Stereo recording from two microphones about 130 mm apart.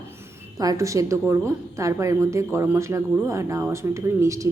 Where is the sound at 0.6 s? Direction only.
25° right (ahead or behind).